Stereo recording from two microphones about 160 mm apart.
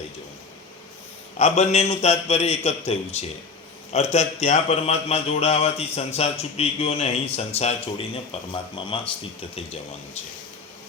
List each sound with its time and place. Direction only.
1.4 s a man's voice: 45° left (ahead or behind)